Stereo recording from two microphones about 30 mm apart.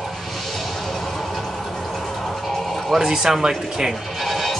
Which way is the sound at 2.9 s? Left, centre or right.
Centre.